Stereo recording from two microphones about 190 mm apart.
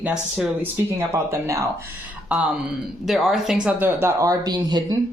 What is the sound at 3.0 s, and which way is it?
Speech, centre (ahead or behind).